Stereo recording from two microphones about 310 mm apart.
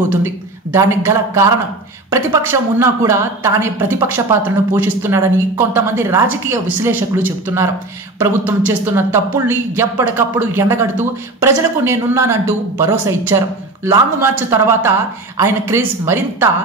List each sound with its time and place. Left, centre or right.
0.7 s speech: centre